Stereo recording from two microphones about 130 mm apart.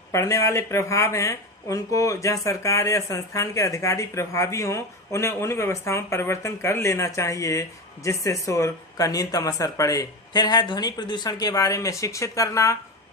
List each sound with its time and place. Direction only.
0.1 s speech: 25° left (ahead or behind)